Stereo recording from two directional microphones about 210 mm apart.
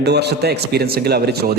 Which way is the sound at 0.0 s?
50° right (ahead or behind).